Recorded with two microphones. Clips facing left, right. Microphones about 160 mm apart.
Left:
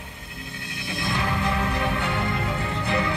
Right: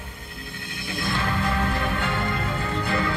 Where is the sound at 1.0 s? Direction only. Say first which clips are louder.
Even; 20° left (ahead or behind).